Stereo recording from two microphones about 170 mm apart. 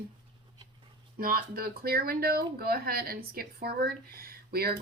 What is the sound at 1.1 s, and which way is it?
Speech, 60° right (ahead or behind).